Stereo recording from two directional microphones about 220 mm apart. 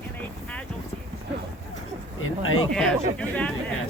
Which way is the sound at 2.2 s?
70° left (ahead or behind).